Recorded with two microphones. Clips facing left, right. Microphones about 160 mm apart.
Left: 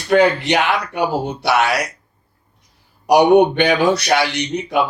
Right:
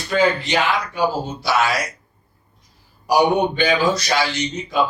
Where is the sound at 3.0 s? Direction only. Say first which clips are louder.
Left 6 dB; 65° left (ahead or behind).